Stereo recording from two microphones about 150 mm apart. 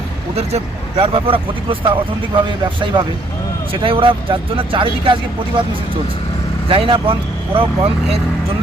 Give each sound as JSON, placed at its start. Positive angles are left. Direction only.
{"t": 0.3, "sound": "speech", "side_deg": -40}
{"t": 6.7, "sound": "speech", "side_deg": -35}